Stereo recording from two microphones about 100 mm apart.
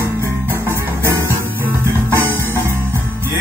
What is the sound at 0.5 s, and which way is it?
Music, 20° left (ahead or behind).